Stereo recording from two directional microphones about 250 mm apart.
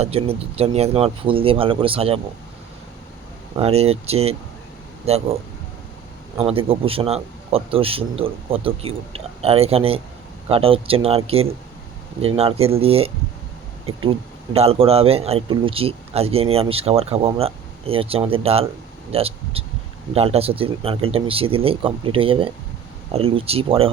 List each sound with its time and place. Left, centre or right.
0.0 s a man's voice: right
3.6 s a man's voice: right
6.3 s a man's voice: right